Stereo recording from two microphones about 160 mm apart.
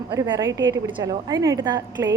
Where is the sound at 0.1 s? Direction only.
25° right (ahead or behind).